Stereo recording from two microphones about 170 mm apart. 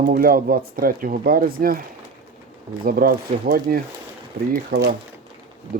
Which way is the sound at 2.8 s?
60° right (ahead or behind).